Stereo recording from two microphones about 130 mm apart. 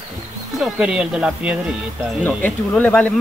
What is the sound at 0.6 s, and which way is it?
Speech, 5° right (ahead or behind).